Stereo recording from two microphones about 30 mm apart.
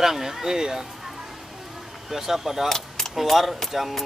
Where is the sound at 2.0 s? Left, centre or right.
Centre.